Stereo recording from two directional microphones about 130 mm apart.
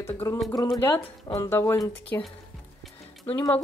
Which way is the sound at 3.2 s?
20° left (ahead or behind).